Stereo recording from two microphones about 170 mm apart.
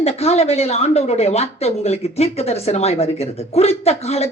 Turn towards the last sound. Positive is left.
turn(degrees=40)  # may be behind; listen again after turning